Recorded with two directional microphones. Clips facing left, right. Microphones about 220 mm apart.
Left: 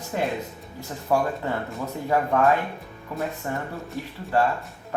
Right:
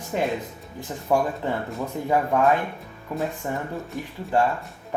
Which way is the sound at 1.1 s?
15° right (ahead or behind).